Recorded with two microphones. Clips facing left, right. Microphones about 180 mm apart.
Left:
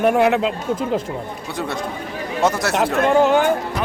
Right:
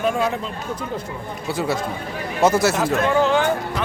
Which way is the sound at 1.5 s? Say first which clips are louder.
Right 4 dB; 5° right (ahead or behind).